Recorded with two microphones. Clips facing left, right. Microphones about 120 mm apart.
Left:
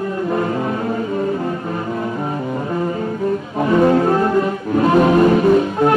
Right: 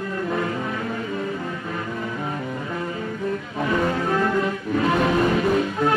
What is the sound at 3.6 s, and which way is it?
Music, 40° left (ahead or behind).